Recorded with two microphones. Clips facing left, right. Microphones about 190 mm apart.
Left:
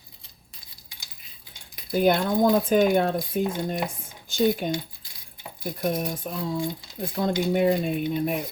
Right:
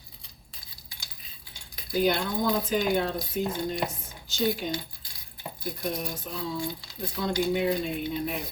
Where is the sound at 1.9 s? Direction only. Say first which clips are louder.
Left 4 dB; 50° left (ahead or behind).